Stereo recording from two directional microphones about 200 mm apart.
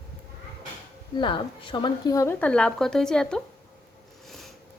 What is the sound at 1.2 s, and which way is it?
A woman's voice, 25° left (ahead or behind).